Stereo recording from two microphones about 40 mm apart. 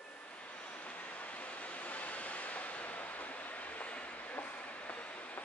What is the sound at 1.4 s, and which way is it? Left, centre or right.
Waves, left.